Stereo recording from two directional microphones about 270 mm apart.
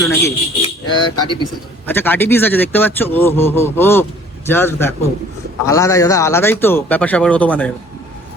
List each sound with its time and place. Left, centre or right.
0.0 s speech: centre